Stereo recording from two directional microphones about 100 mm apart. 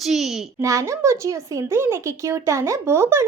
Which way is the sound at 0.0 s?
5° right (ahead or behind).